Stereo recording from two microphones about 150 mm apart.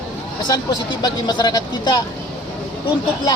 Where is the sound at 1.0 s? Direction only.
25° left (ahead or behind).